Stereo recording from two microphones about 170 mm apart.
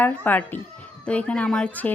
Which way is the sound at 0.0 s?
10° left (ahead or behind).